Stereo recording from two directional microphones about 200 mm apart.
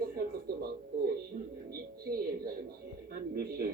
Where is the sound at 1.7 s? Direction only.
50° right (ahead or behind).